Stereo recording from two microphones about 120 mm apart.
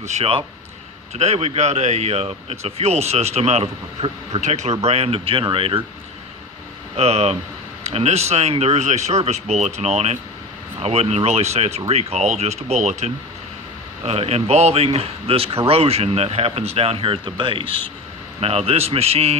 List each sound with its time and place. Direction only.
0.0 s speech: 65° right (ahead or behind); by 5.9 s 45° right (ahead or behind)
7.0 s speech: 60° right (ahead or behind)